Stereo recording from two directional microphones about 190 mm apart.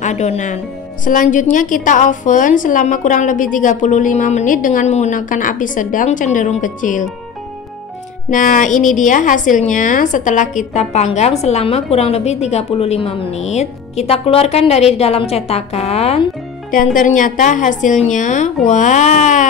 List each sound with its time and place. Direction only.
0.0 s a woman's voice: 35° left (ahead or behind)
8.3 s a woman's voice: 45° left (ahead or behind)
16.7 s a woman's voice: 45° left (ahead or behind)